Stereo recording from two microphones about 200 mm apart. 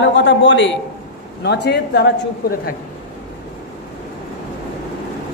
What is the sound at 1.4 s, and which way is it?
Speech, 55° left (ahead or behind).